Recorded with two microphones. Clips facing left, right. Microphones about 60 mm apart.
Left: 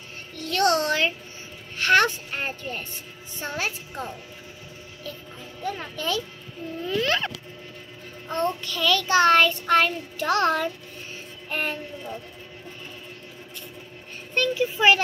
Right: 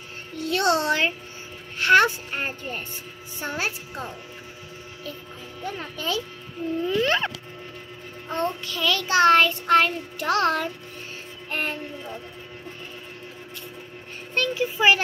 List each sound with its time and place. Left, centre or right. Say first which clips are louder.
0.4 s a child's voice: even; centre
5.7 s child singing: left 1 dB; centre
6.8 s a child's voice: right 2 dB; centre
7.1 s a sound: right 2 dB; centre
8.3 s child singing: left 1 dB; centre
14.5 s a child's voice: even; centre